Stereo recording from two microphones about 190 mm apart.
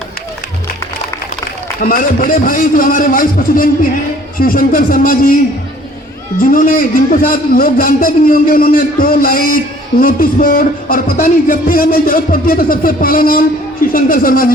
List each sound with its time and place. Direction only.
1.8 s music: 50° left (ahead or behind)
6.4 s music: 45° left (ahead or behind)